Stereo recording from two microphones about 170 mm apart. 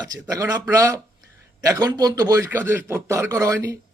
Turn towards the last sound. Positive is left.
turn(degrees=-20)  # may be behind; listen again after turning